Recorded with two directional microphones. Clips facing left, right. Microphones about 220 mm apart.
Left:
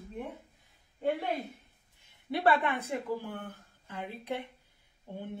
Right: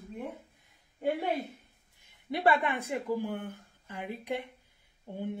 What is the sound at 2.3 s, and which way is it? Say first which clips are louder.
Speech: even; 15° right (ahead or behind).